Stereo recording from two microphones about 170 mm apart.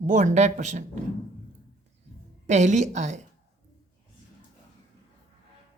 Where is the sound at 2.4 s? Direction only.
45° right (ahead or behind).